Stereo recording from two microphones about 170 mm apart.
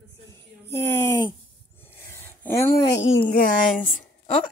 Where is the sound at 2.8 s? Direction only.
90° left.